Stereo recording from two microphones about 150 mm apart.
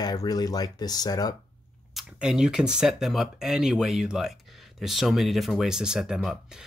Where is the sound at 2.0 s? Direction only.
5° right (ahead or behind).